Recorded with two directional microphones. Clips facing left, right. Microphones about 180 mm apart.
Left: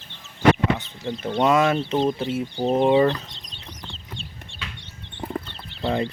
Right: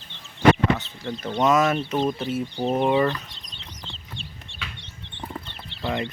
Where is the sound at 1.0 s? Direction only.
25° left (ahead or behind).